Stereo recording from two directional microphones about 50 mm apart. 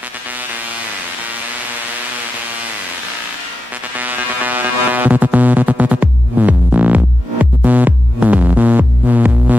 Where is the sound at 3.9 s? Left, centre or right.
Right.